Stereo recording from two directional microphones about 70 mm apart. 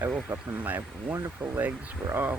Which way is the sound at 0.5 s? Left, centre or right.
Right.